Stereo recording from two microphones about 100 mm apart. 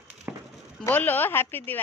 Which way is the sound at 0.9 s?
20° left (ahead or behind).